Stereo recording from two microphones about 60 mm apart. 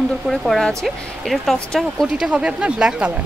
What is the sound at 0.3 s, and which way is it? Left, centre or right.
Speech, centre.